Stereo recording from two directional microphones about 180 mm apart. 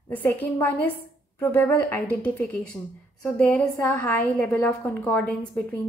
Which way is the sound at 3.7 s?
15° left (ahead or behind).